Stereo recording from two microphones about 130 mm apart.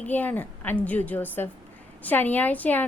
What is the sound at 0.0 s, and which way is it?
A woman's voice, 15° left (ahead or behind).